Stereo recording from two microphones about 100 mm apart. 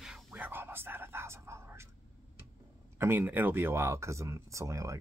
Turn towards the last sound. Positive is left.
turn(degrees=-30)  # may be behind; listen again after turning